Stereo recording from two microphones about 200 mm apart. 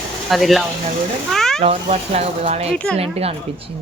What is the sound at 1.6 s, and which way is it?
Speech, 30° right (ahead or behind).